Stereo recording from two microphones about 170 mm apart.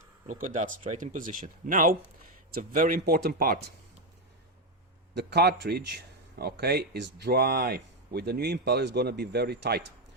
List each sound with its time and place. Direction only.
0.3 s speech: 50° right (ahead or behind)
5.1 s speech: 75° right (ahead or behind)